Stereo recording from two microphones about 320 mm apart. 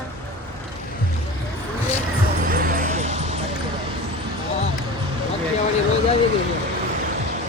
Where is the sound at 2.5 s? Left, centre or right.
Right.